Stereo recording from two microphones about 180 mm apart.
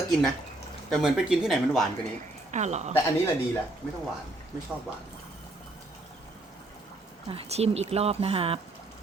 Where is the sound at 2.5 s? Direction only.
40° right (ahead or behind).